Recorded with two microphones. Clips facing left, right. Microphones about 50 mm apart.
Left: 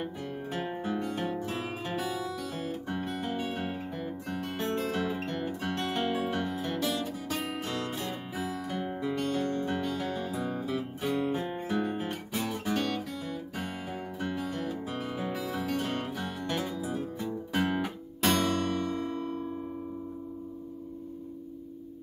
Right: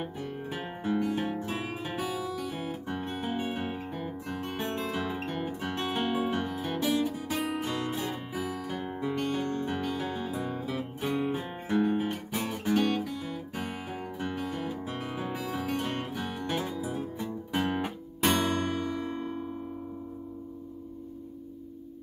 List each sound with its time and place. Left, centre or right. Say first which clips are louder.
0.0 s guitar: even; centre
1.0 s music: right 2 dB; centre